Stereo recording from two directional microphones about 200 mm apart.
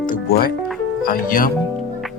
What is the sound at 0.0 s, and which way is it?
Music, 45° left (ahead or behind).